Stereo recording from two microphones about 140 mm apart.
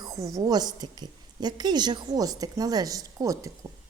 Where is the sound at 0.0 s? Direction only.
25° right (ahead or behind).